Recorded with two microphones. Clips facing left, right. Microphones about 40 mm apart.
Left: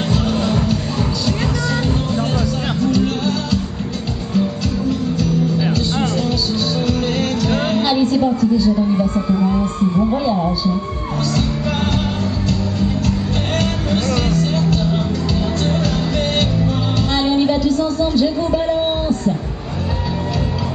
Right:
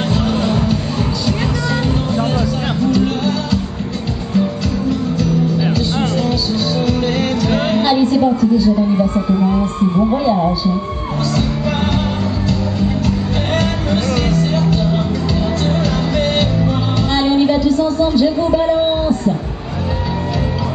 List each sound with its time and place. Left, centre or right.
0.1 s music: centre
2.3 s music: centre
5.2 s music: centre
9.3 s a man's voice: right
12.4 s music: centre